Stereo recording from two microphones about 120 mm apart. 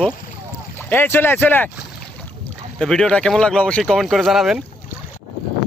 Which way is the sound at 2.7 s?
5° left (ahead or behind).